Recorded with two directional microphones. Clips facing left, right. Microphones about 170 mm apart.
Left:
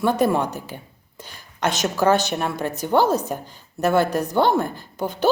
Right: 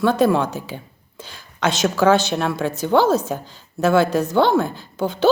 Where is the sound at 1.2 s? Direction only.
90° right.